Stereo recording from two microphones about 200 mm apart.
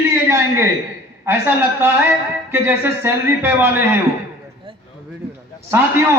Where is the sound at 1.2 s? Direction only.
10° right (ahead or behind).